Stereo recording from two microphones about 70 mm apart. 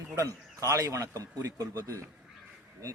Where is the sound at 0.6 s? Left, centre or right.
Right.